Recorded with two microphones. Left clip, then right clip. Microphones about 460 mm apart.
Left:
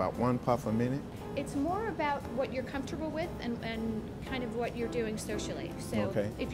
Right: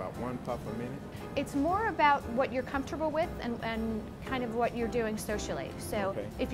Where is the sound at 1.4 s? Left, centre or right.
Right.